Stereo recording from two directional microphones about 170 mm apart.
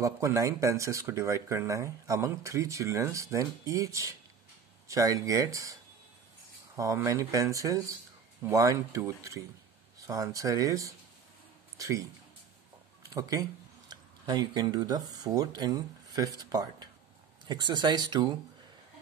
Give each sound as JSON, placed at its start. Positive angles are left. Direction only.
{"t": 0.0, "sound": "speech", "side_deg": -20}
{"t": 13.1, "sound": "speech", "side_deg": -20}